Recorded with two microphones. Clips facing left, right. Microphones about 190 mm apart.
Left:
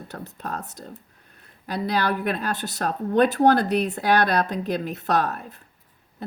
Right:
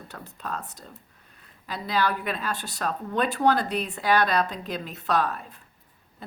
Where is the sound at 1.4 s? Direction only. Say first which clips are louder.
Left 7 dB; 60° left (ahead or behind).